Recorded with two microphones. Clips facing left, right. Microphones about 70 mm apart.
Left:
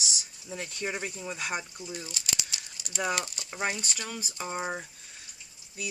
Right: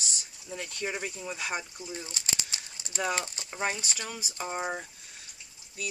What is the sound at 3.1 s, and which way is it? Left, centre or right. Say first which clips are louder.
Speech: even; right.